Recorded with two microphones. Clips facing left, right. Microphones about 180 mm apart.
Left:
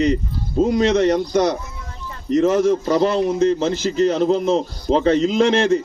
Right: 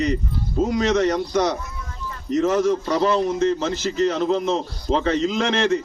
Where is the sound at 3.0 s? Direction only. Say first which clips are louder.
Left 3 dB; 35° left (ahead or behind).